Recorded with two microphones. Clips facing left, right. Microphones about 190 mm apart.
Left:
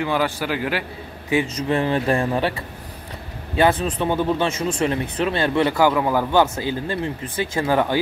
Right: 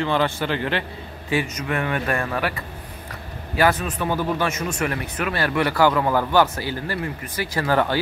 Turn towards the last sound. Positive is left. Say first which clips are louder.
# left 1 dB
turn(degrees=15)  # may be behind; listen again after turning